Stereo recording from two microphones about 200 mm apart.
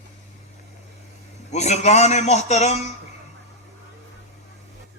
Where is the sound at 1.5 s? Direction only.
35° left (ahead or behind).